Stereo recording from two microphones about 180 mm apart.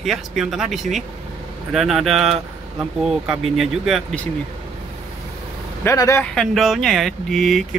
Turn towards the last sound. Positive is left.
turn(degrees=0)  # may be behind; listen again after turning